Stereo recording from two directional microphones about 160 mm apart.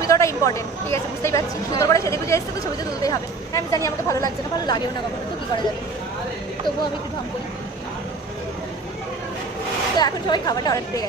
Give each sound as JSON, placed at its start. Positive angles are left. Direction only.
{"t": 0.1, "sound": "speech", "side_deg": 20}
{"t": 9.9, "sound": "speech", "side_deg": 25}